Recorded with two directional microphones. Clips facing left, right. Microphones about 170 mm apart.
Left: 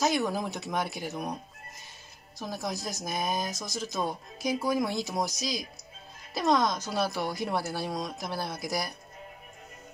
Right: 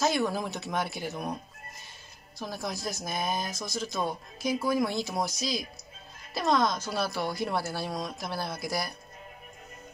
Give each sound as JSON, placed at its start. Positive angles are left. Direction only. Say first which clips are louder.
{"t": 0.0, "sound": "speech", "louder": "even", "side_deg": 15}